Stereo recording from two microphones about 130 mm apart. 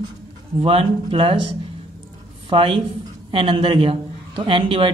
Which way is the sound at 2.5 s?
45° right (ahead or behind).